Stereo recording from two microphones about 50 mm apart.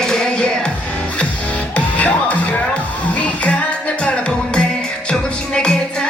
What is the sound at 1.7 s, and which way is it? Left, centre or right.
Music, left.